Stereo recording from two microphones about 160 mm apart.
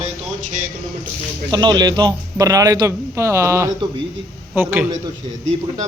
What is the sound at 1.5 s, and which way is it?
A man's voice, 25° right (ahead or behind).